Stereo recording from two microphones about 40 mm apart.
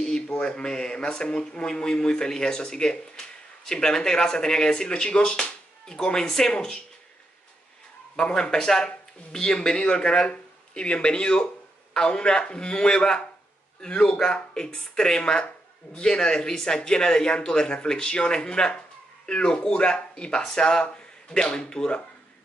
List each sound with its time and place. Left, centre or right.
0.0 s speech: centre
8.2 s speech: left